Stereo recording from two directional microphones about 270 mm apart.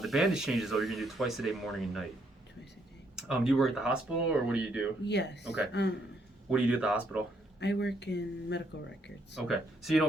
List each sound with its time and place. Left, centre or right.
0.0 s speech: centre
3.2 s speech: centre
5.0 s speech: left
6.5 s speech: centre
7.6 s speech: left
9.3 s speech: centre